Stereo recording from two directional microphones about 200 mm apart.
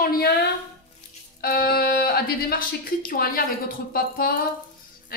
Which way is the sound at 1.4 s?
50° left (ahead or behind).